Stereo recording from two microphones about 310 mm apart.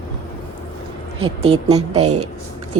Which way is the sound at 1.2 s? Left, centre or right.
Centre.